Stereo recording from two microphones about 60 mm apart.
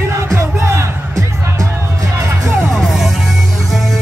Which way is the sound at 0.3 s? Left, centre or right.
Right.